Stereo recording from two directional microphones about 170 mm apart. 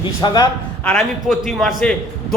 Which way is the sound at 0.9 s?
Centre (ahead or behind).